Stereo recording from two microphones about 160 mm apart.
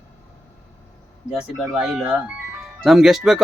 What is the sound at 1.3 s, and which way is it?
Speech, 5° right (ahead or behind).